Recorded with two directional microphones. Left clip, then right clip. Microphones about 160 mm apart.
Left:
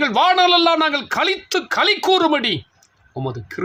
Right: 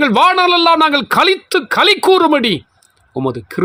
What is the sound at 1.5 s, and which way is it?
Speech, 45° right (ahead or behind).